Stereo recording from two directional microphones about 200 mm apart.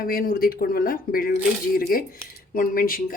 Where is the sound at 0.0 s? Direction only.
45° left (ahead or behind).